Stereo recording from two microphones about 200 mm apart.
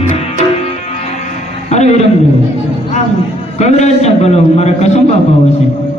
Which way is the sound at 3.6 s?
35° left (ahead or behind).